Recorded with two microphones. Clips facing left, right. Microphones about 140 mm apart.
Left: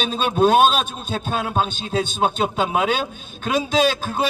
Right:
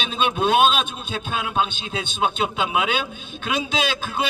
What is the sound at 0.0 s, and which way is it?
A man's voice, 40° left (ahead or behind).